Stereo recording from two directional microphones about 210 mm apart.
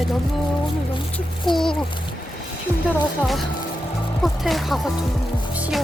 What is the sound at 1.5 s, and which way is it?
Speech, 20° left (ahead or behind).